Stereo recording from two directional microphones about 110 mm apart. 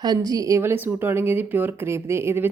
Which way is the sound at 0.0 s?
35° right (ahead or behind).